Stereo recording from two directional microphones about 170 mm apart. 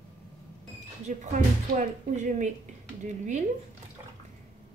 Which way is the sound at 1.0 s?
45° right (ahead or behind).